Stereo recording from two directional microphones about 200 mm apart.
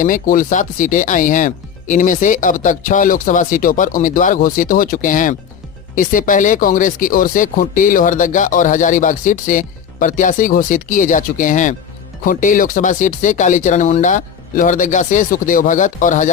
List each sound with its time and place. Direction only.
0.0 s speech: 40° left (ahead or behind)